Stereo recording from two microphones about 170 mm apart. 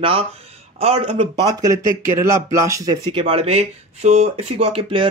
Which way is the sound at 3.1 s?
35° right (ahead or behind).